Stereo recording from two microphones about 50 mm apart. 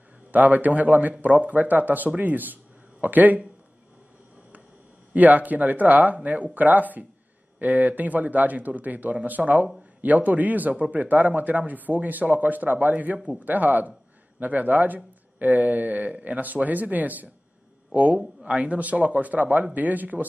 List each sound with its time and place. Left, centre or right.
0.3 s speech: right
5.1 s speech: right
16.3 s speech: right